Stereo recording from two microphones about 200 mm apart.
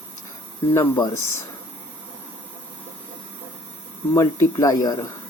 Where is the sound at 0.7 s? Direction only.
15° left (ahead or behind).